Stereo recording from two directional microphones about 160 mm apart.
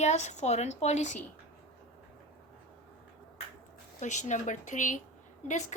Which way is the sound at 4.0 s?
50° left (ahead or behind).